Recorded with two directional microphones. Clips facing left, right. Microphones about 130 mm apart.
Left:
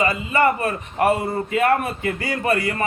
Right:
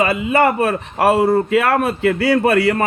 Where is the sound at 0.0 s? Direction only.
70° right (ahead or behind).